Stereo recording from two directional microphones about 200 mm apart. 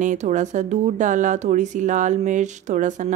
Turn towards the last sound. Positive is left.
turn(degrees=-40)  # may be behind; listen again after turning